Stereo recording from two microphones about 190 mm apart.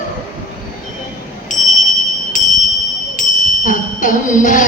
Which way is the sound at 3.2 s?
45° left (ahead or behind).